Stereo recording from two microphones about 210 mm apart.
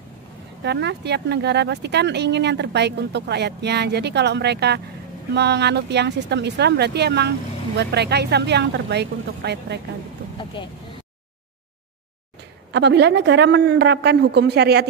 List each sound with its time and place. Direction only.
0.7 s speech: 55° right (ahead or behind)
10.3 s vehicle: 20° left (ahead or behind)
12.7 s speech: 55° right (ahead or behind)